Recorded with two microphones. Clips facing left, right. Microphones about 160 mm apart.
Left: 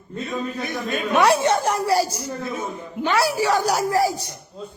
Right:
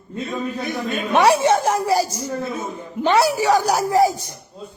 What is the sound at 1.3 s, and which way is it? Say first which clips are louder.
A woman's voice: right 2 dB; 15° right (ahead or behind).